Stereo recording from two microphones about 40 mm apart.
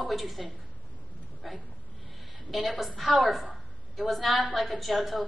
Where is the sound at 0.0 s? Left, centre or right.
Centre.